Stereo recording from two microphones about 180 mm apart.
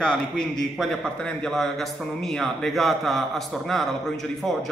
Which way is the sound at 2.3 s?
Centre (ahead or behind).